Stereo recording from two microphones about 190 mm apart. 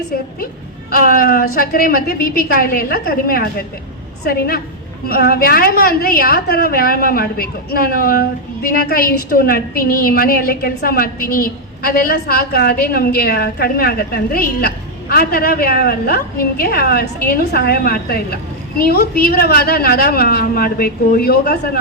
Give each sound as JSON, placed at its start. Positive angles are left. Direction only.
{"t": 0.9, "sound": "a woman's voice", "side_deg": 50}